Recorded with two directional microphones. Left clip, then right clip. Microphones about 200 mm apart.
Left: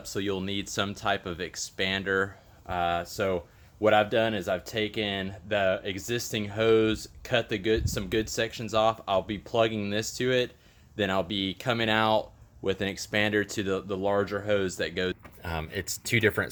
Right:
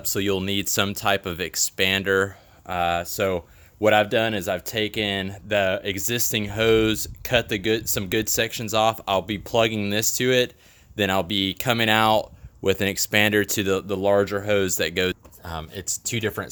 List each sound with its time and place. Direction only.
0.0 s speech: 55° right (ahead or behind)
15.4 s speech: centre (ahead or behind)